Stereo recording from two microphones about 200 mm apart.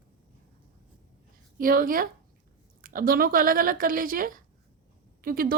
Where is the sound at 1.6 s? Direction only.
45° right (ahead or behind).